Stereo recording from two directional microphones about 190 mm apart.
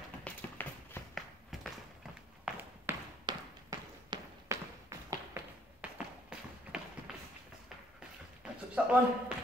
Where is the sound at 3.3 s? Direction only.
20° right (ahead or behind).